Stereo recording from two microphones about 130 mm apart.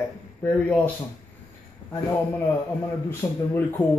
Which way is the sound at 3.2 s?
25° left (ahead or behind).